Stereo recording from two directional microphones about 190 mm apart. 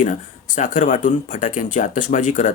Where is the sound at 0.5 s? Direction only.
40° left (ahead or behind).